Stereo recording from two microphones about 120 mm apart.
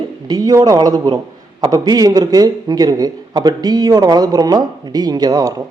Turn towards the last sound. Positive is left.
turn(degrees=-30)  # may be behind; listen again after turning